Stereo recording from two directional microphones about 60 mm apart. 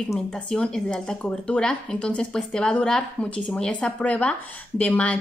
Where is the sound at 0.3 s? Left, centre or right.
Centre.